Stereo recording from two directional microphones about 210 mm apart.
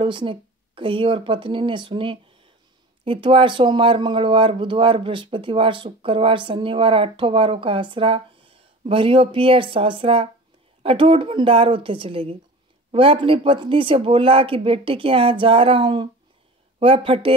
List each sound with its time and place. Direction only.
0.0 s speech: 25° right (ahead or behind)